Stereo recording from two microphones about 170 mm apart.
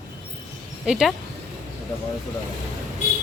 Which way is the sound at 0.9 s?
Centre (ahead or behind).